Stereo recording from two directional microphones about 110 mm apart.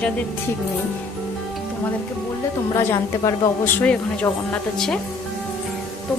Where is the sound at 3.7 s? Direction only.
15° left (ahead or behind).